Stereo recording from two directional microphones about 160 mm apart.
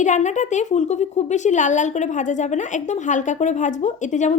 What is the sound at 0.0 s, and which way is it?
Speech, 50° left (ahead or behind).